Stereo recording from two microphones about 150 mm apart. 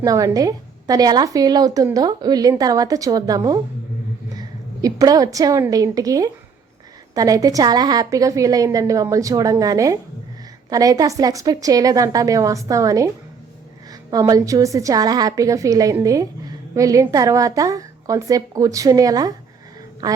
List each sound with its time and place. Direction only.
0.0 s a woman's voice: 25° right (ahead or behind)
14.1 s a woman's voice: 25° right (ahead or behind)